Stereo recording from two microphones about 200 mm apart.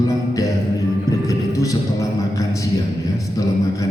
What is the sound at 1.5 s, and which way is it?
Music, 15° left (ahead or behind).